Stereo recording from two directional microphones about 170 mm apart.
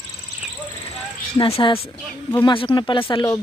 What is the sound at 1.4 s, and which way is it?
Speech, 30° left (ahead or behind).